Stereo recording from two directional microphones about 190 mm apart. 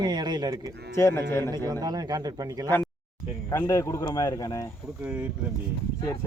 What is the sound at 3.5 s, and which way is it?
Speech, 15° left (ahead or behind).